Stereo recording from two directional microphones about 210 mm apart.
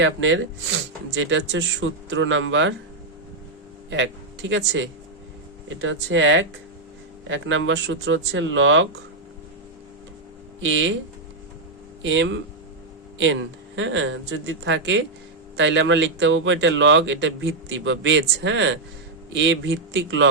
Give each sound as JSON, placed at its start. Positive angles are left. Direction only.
{"t": 0.0, "sound": "speech", "side_deg": -65}
{"t": 3.8, "sound": "speech", "side_deg": -60}
{"t": 10.6, "sound": "speech", "side_deg": -65}
{"t": 12.0, "sound": "speech", "side_deg": -60}